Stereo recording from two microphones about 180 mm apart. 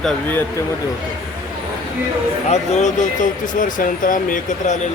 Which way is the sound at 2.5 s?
40° left (ahead or behind).